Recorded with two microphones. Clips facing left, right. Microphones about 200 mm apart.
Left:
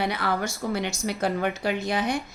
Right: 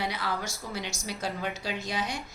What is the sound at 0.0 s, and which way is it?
Speech, 60° left (ahead or behind).